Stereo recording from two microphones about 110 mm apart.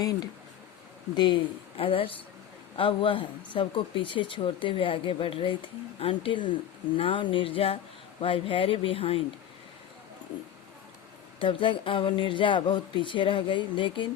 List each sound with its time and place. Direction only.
1.1 s speech: 45° left (ahead or behind)
11.3 s speech: 50° left (ahead or behind)